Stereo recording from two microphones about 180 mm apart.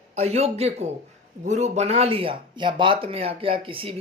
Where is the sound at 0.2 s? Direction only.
35° right (ahead or behind).